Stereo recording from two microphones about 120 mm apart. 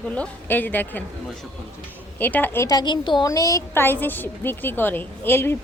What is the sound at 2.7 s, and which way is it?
Speech, 40° left (ahead or behind).